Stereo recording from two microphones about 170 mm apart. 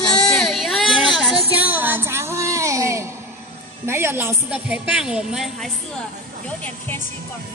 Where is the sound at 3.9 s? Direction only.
15° right (ahead or behind).